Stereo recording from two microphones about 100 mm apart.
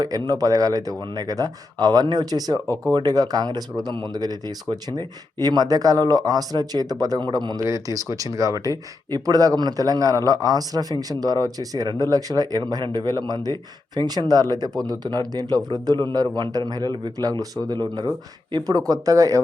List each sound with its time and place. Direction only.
0.0 s a man's voice: 40° right (ahead or behind)
18.5 s a man's voice: 40° right (ahead or behind)